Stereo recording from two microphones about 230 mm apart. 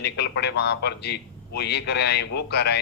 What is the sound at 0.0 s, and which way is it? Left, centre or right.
A man's voice, left.